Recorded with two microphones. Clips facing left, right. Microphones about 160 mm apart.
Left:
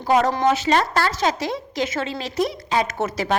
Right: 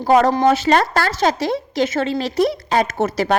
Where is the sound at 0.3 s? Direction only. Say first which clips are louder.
Right 4 dB; 35° right (ahead or behind).